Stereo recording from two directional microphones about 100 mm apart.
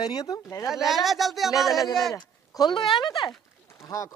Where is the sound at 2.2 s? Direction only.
45° left (ahead or behind).